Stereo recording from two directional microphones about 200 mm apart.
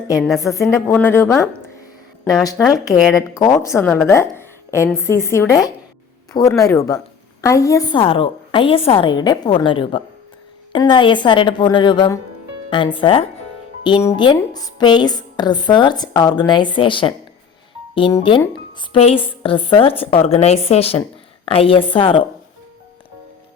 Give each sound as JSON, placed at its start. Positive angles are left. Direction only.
{"t": 0.3, "sound": "a woman's voice", "side_deg": 15}